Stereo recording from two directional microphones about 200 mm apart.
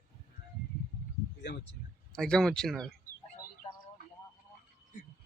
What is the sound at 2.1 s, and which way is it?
Speech, 5° left (ahead or behind).